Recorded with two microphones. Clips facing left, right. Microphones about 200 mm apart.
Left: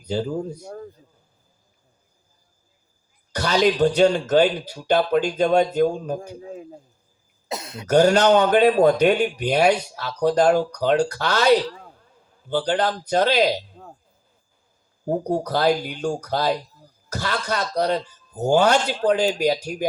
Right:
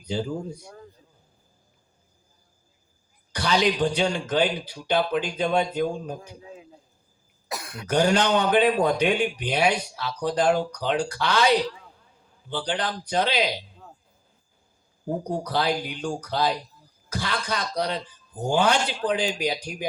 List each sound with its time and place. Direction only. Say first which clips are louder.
0.0 s speech: left 4 dB; 40° left (ahead or behind)
3.3 s speech: left 4 dB; 40° left (ahead or behind)
7.4 s cough: left 4 dB; 25° left (ahead or behind)
7.9 s speech: left 6 dB; 40° left (ahead or behind)
15.0 s a man's voice: left 5 dB; 45° left (ahead or behind)